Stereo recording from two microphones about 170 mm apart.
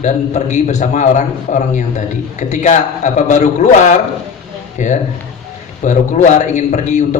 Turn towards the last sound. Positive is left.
turn(degrees=45)  # may be behind; listen again after turning